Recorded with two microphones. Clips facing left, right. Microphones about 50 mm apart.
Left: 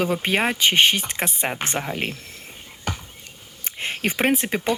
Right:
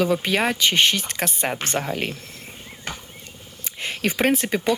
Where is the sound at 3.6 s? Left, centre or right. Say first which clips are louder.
Even; left.